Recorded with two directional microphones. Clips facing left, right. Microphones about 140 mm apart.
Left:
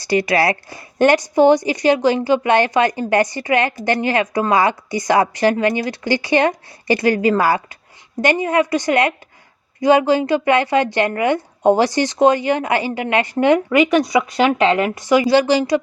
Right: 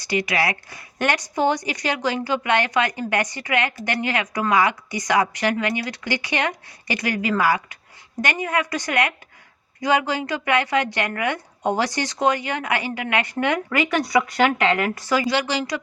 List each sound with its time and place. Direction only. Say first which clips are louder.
0.0 s a woman's voice: left 6 dB; 35° left (ahead or behind)